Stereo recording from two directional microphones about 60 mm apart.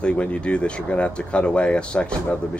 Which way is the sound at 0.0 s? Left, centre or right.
Centre.